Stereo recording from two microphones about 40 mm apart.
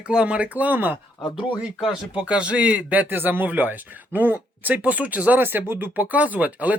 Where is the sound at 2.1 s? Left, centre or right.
Right.